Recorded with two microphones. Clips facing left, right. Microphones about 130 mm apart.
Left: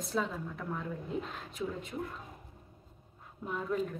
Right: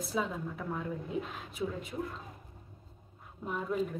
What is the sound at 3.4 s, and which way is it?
Speech, 10° right (ahead or behind).